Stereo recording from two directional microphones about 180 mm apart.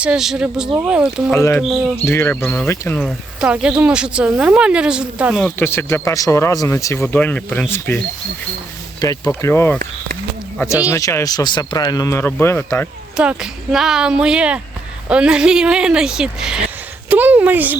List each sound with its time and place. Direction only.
0.0 s speech: 5° right (ahead or behind)
1.3 s speech: 10° left (ahead or behind); by 5.4 s 5° right (ahead or behind)
5.4 s speech: 10° left (ahead or behind)
9.0 s speech: 20° left (ahead or behind)
10.8 s speech: 15° left (ahead or behind)
13.1 s speech: 5° right (ahead or behind)